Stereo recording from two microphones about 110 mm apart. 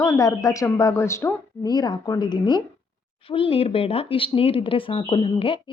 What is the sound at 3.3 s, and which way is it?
Speech, 55° left (ahead or behind).